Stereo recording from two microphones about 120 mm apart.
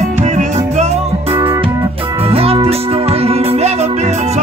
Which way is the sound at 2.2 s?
55° right (ahead or behind).